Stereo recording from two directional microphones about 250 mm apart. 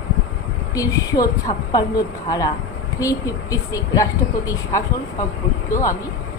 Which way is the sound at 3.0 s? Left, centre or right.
Centre.